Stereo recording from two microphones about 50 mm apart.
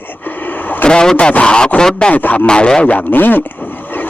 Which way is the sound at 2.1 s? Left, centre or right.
Left.